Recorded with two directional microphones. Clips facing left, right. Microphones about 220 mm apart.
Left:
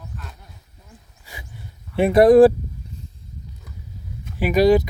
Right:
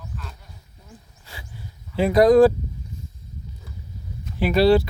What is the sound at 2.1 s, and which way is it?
Speech, 30° left (ahead or behind).